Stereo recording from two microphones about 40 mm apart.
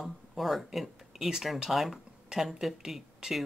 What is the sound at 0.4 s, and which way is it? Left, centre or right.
Speech, centre.